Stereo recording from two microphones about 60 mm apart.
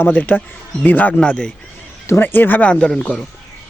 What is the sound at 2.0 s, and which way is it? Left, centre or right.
Speech, left.